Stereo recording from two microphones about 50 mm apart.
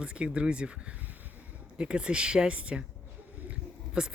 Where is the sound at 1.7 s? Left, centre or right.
Centre.